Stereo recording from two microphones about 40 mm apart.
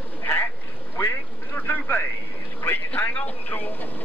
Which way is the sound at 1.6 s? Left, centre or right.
Left.